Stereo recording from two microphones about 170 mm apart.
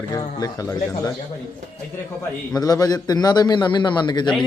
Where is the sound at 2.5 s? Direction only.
20° left (ahead or behind).